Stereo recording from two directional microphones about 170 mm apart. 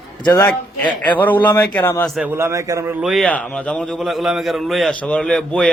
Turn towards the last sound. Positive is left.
turn(degrees=5)  # may be behind; listen again after turning